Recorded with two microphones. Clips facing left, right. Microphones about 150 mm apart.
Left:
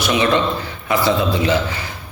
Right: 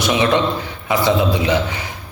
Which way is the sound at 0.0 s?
15° right (ahead or behind).